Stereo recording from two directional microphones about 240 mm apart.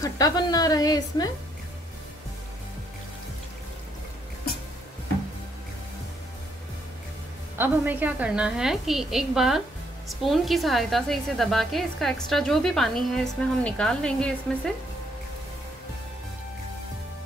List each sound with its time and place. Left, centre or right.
0.0 s a woman's voice: centre
7.5 s speech: centre